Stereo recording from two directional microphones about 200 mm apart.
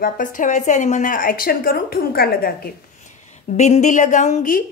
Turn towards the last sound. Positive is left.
turn(degrees=45)  # may be behind; listen again after turning